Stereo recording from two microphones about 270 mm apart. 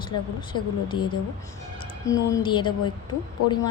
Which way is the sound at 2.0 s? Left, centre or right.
Centre.